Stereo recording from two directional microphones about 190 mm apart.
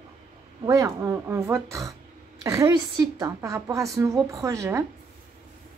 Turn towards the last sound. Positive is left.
turn(degrees=-15)  # may be behind; listen again after turning